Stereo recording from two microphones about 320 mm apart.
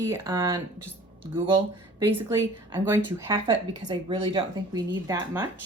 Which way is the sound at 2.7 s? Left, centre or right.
Centre.